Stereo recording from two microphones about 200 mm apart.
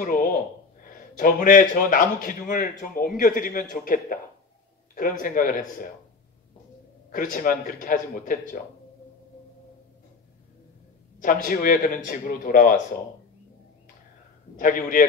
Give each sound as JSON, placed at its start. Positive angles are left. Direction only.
{"t": 0.0, "sound": "a man's voice", "side_deg": 45}
{"t": 7.1, "sound": "a man's voice", "side_deg": 45}
{"t": 11.4, "sound": "a man's voice", "side_deg": 45}
{"t": 14.6, "sound": "a man's voice", "side_deg": 40}